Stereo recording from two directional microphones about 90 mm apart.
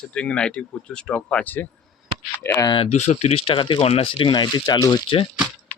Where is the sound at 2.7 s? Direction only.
90° left; by 4.9 s 50° left (ahead or behind).